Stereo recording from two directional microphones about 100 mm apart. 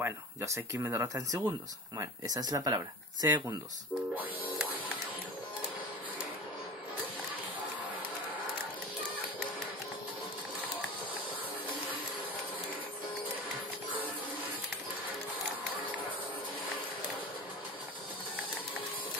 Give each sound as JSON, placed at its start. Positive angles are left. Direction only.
{"t": 0.0, "sound": "speech", "side_deg": -30}